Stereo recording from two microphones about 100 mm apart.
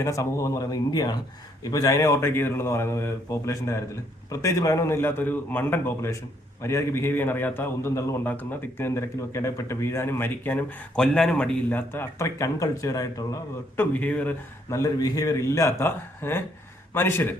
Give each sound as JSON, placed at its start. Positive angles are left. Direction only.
{"t": 0.0, "sound": "a man's voice", "side_deg": 30}
{"t": 10.9, "sound": "a man's voice", "side_deg": 5}
{"t": 11.7, "sound": "speech", "side_deg": 20}
{"t": 13.7, "sound": "a man's voice", "side_deg": 15}
{"t": 14.7, "sound": "a man's voice", "side_deg": 35}